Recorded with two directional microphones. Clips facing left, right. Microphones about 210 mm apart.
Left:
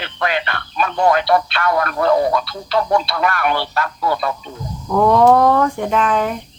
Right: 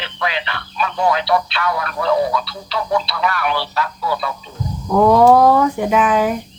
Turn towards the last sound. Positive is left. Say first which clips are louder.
# right 2 dB
turn(degrees=-5)  # may be behind; listen again after turning